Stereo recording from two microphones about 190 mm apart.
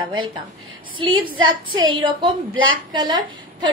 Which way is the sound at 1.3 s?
90° right.